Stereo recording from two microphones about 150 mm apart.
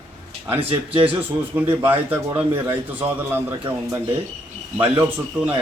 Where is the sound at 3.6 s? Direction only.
25° right (ahead or behind).